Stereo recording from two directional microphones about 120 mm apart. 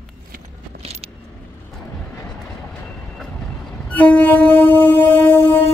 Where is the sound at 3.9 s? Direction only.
15° left (ahead or behind).